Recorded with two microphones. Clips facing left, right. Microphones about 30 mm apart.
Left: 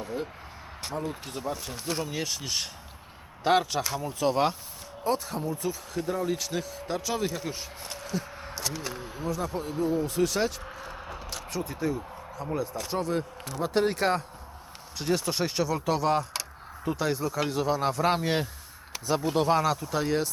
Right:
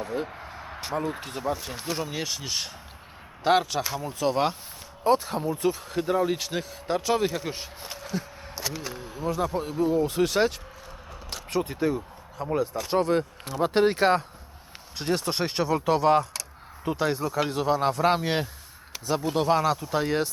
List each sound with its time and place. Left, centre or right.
0.0 s a sound: centre
1.2 s speech: centre
5.0 s speech: right
7.8 s a sound: centre
8.5 s speech: centre
9.3 s speech: centre
10.1 s speech: right
11.5 s speech: right
12.9 s speech: right; by 18.4 s centre
18.9 s speech: centre